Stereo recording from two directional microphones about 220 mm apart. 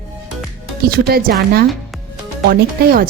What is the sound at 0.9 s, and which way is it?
Speech, 45° right (ahead or behind).